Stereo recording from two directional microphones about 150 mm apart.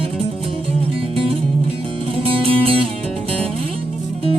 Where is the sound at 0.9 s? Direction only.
35° right (ahead or behind).